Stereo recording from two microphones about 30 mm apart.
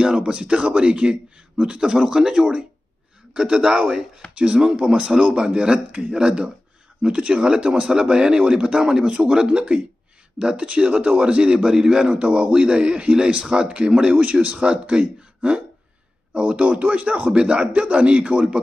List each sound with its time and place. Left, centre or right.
0.0 s a man's voice: right
4.6 s a man's voice: right
7.4 s speech: right
10.4 s speech: centre
10.7 s a man's voice: right
17.3 s a man's voice: right